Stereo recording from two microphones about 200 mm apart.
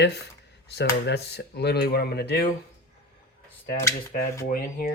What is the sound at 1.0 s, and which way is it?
Speech, 55° left (ahead or behind).